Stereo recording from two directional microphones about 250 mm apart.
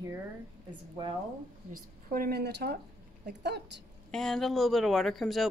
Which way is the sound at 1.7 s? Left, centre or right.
Right.